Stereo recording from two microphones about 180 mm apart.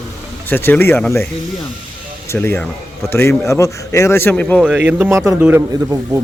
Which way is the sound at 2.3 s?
10° left (ahead or behind).